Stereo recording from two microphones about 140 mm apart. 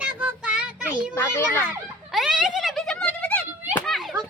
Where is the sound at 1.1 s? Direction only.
15° left (ahead or behind).